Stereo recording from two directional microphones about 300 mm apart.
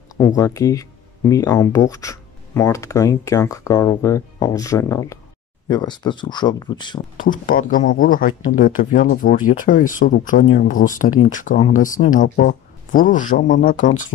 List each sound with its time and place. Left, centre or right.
0.4 s speech: centre
7.2 s speech: left